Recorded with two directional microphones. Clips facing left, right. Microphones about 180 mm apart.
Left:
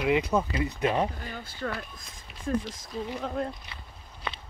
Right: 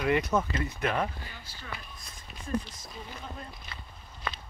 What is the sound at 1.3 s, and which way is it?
Speech, 55° left (ahead or behind).